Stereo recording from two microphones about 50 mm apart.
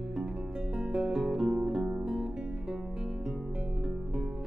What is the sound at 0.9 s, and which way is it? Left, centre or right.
Music, centre.